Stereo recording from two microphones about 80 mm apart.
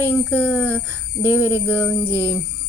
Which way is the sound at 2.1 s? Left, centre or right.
Right.